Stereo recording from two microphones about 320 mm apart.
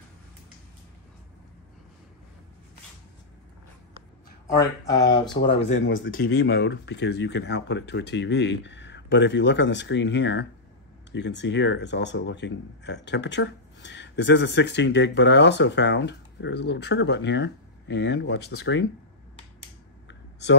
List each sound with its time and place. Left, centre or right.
4.6 s speech: centre
5.4 s speech: left
20.1 s a sound: left